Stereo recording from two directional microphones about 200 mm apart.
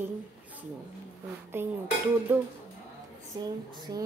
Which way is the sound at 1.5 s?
10° right (ahead or behind).